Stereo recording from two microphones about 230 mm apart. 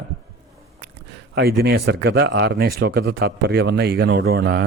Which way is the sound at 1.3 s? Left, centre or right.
Right.